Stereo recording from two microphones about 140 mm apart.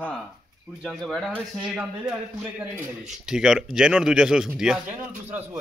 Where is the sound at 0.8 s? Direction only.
Centre (ahead or behind).